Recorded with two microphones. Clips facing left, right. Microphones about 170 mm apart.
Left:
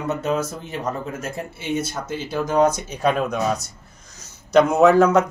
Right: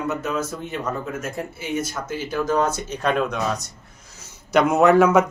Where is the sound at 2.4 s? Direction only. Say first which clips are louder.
Left 5 dB; 15° left (ahead or behind).